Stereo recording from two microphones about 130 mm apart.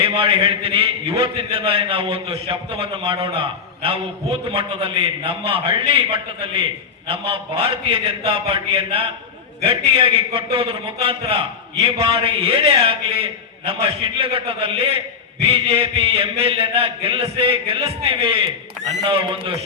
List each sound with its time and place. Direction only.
0.0 s a man's voice: 45° right (ahead or behind)